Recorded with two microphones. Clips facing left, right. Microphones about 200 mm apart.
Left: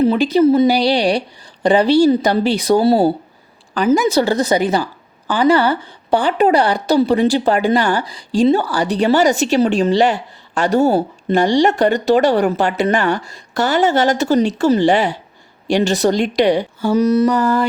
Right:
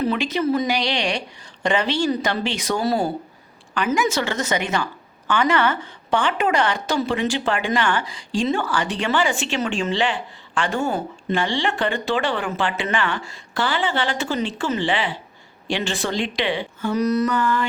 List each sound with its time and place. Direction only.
0.0 s a woman's voice: 30° left (ahead or behind)
17.0 s a woman's voice: 25° left (ahead or behind)